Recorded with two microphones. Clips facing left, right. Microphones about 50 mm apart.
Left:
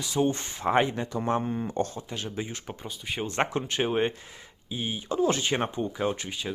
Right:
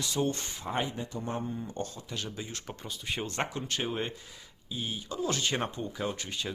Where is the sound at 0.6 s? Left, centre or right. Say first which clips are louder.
Left 9 dB; left.